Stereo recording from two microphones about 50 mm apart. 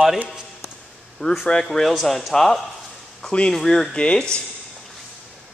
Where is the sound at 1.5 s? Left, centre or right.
Centre.